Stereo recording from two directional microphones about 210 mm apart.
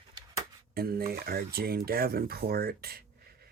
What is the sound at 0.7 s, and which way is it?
Speech, 45° right (ahead or behind).